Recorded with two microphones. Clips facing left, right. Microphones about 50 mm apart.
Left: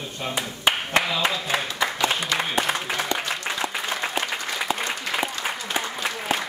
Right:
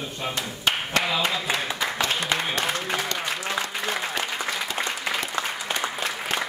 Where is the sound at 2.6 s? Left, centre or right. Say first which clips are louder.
Left 2 dB; centre.